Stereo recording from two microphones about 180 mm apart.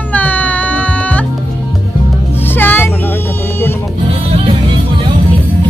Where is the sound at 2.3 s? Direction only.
10° left (ahead or behind).